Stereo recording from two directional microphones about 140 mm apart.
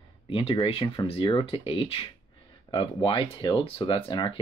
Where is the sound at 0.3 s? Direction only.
40° left (ahead or behind).